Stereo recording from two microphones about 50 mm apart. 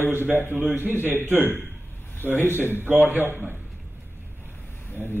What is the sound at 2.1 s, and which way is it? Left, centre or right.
Speech, left.